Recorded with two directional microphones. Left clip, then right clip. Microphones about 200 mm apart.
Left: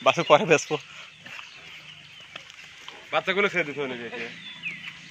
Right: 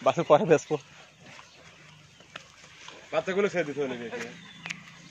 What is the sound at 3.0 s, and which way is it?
Speech, 20° left (ahead or behind).